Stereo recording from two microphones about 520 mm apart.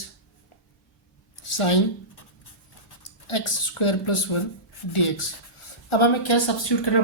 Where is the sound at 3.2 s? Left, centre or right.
Left.